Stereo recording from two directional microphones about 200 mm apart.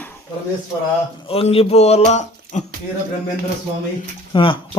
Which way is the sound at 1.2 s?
30° left (ahead or behind).